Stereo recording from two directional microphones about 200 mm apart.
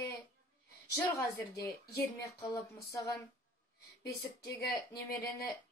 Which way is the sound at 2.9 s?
15° left (ahead or behind).